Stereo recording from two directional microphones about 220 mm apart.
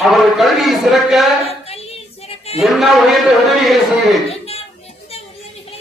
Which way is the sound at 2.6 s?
Centre (ahead or behind).